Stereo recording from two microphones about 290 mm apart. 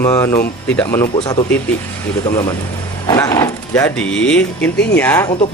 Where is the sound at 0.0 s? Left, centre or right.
Centre.